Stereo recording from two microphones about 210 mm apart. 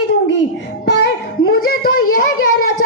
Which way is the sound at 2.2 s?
45° left (ahead or behind).